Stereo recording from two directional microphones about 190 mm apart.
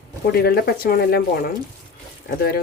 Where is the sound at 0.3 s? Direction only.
55° left (ahead or behind).